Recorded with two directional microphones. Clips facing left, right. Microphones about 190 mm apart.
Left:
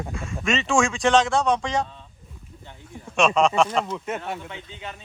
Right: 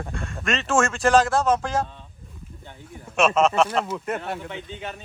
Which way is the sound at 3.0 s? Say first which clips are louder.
Even; 5° right (ahead or behind).